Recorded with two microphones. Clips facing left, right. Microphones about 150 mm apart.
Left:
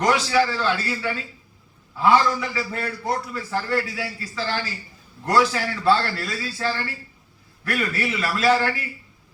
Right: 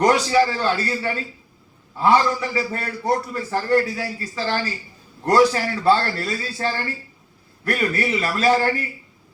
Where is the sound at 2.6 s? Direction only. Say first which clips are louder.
Right 3 dB; 40° right (ahead or behind).